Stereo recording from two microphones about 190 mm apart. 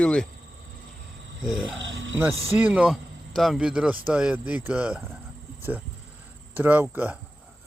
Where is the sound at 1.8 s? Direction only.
85° right.